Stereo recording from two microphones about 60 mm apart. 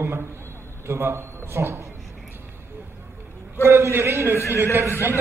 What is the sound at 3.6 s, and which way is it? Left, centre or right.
Speech, right.